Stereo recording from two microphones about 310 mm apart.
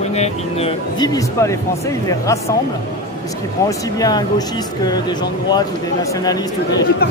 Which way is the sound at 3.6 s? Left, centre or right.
Centre.